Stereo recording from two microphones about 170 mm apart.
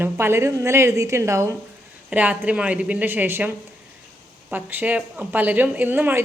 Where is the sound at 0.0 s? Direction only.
15° right (ahead or behind).